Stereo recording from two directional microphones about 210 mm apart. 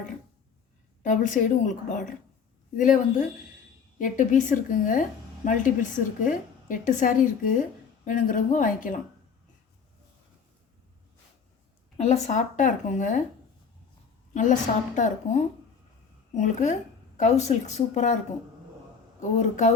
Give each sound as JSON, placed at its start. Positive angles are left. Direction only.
{"t": 1.0, "sound": "a woman's voice", "side_deg": 40}
{"t": 12.0, "sound": "a woman's voice", "side_deg": 30}
{"t": 14.3, "sound": "a woman's voice", "side_deg": 35}
{"t": 19.4, "sound": "a woman's voice", "side_deg": 35}